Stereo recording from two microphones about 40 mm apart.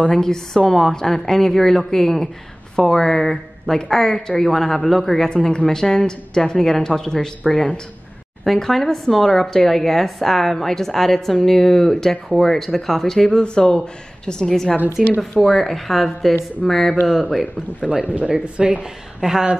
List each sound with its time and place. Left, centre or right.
0.1 s speech: centre
5.5 s speech: centre
15.0 s speech: left
15.4 s speech: centre
17.4 s speech: right